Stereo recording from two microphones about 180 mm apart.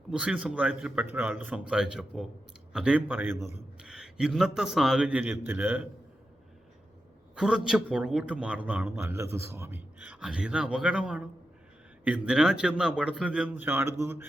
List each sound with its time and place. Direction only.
0.1 s a man's voice: 5° right (ahead or behind)
7.3 s a man's voice: 5° right (ahead or behind)